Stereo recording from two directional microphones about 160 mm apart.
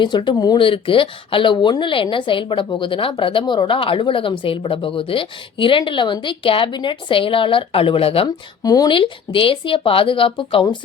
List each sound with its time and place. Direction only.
0.0 s speech: 30° left (ahead or behind)
8.6 s speech: 25° left (ahead or behind)